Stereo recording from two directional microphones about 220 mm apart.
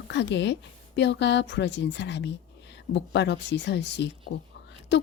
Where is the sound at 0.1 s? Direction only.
55° left (ahead or behind).